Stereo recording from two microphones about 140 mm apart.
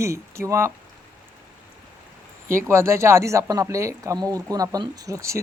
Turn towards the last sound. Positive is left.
turn(degrees=-20)  # may be behind; listen again after turning